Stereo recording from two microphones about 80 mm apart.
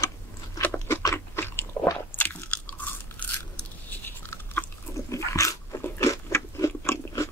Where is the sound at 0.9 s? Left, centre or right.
Left.